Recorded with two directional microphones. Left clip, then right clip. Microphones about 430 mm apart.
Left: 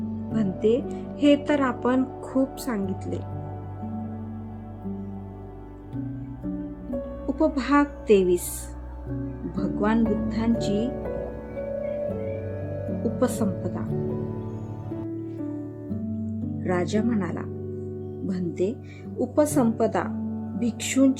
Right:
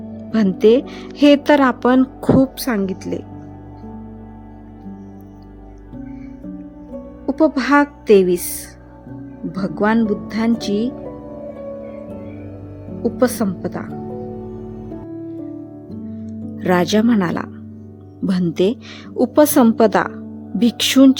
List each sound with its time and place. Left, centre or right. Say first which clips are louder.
0.3 s speech: right 10 dB; centre
7.3 s a woman's voice: right 8 dB; centre
9.6 s speech: right 7 dB; centre
13.0 s speech: right 8 dB; centre
16.6 s speech: right 10 dB; centre